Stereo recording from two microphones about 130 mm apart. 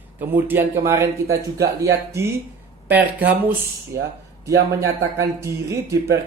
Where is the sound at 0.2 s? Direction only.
15° right (ahead or behind).